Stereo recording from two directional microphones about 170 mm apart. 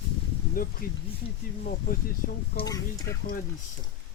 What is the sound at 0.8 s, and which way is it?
Speech, 55° left (ahead or behind).